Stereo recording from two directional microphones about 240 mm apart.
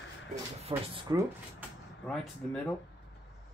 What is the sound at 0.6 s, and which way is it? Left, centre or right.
Speech, right.